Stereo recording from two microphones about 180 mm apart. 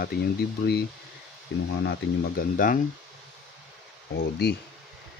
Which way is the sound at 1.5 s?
80° left.